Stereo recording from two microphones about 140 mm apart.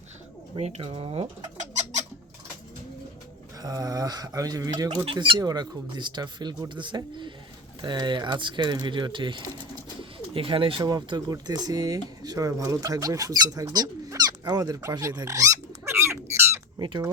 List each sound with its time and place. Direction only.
0.5 s speech: 45° right (ahead or behind)
3.6 s mantra: 25° right (ahead or behind)
5.0 s speech: 35° right (ahead or behind); by 16.8 s 20° right (ahead or behind)
16.8 s speech: 35° right (ahead or behind)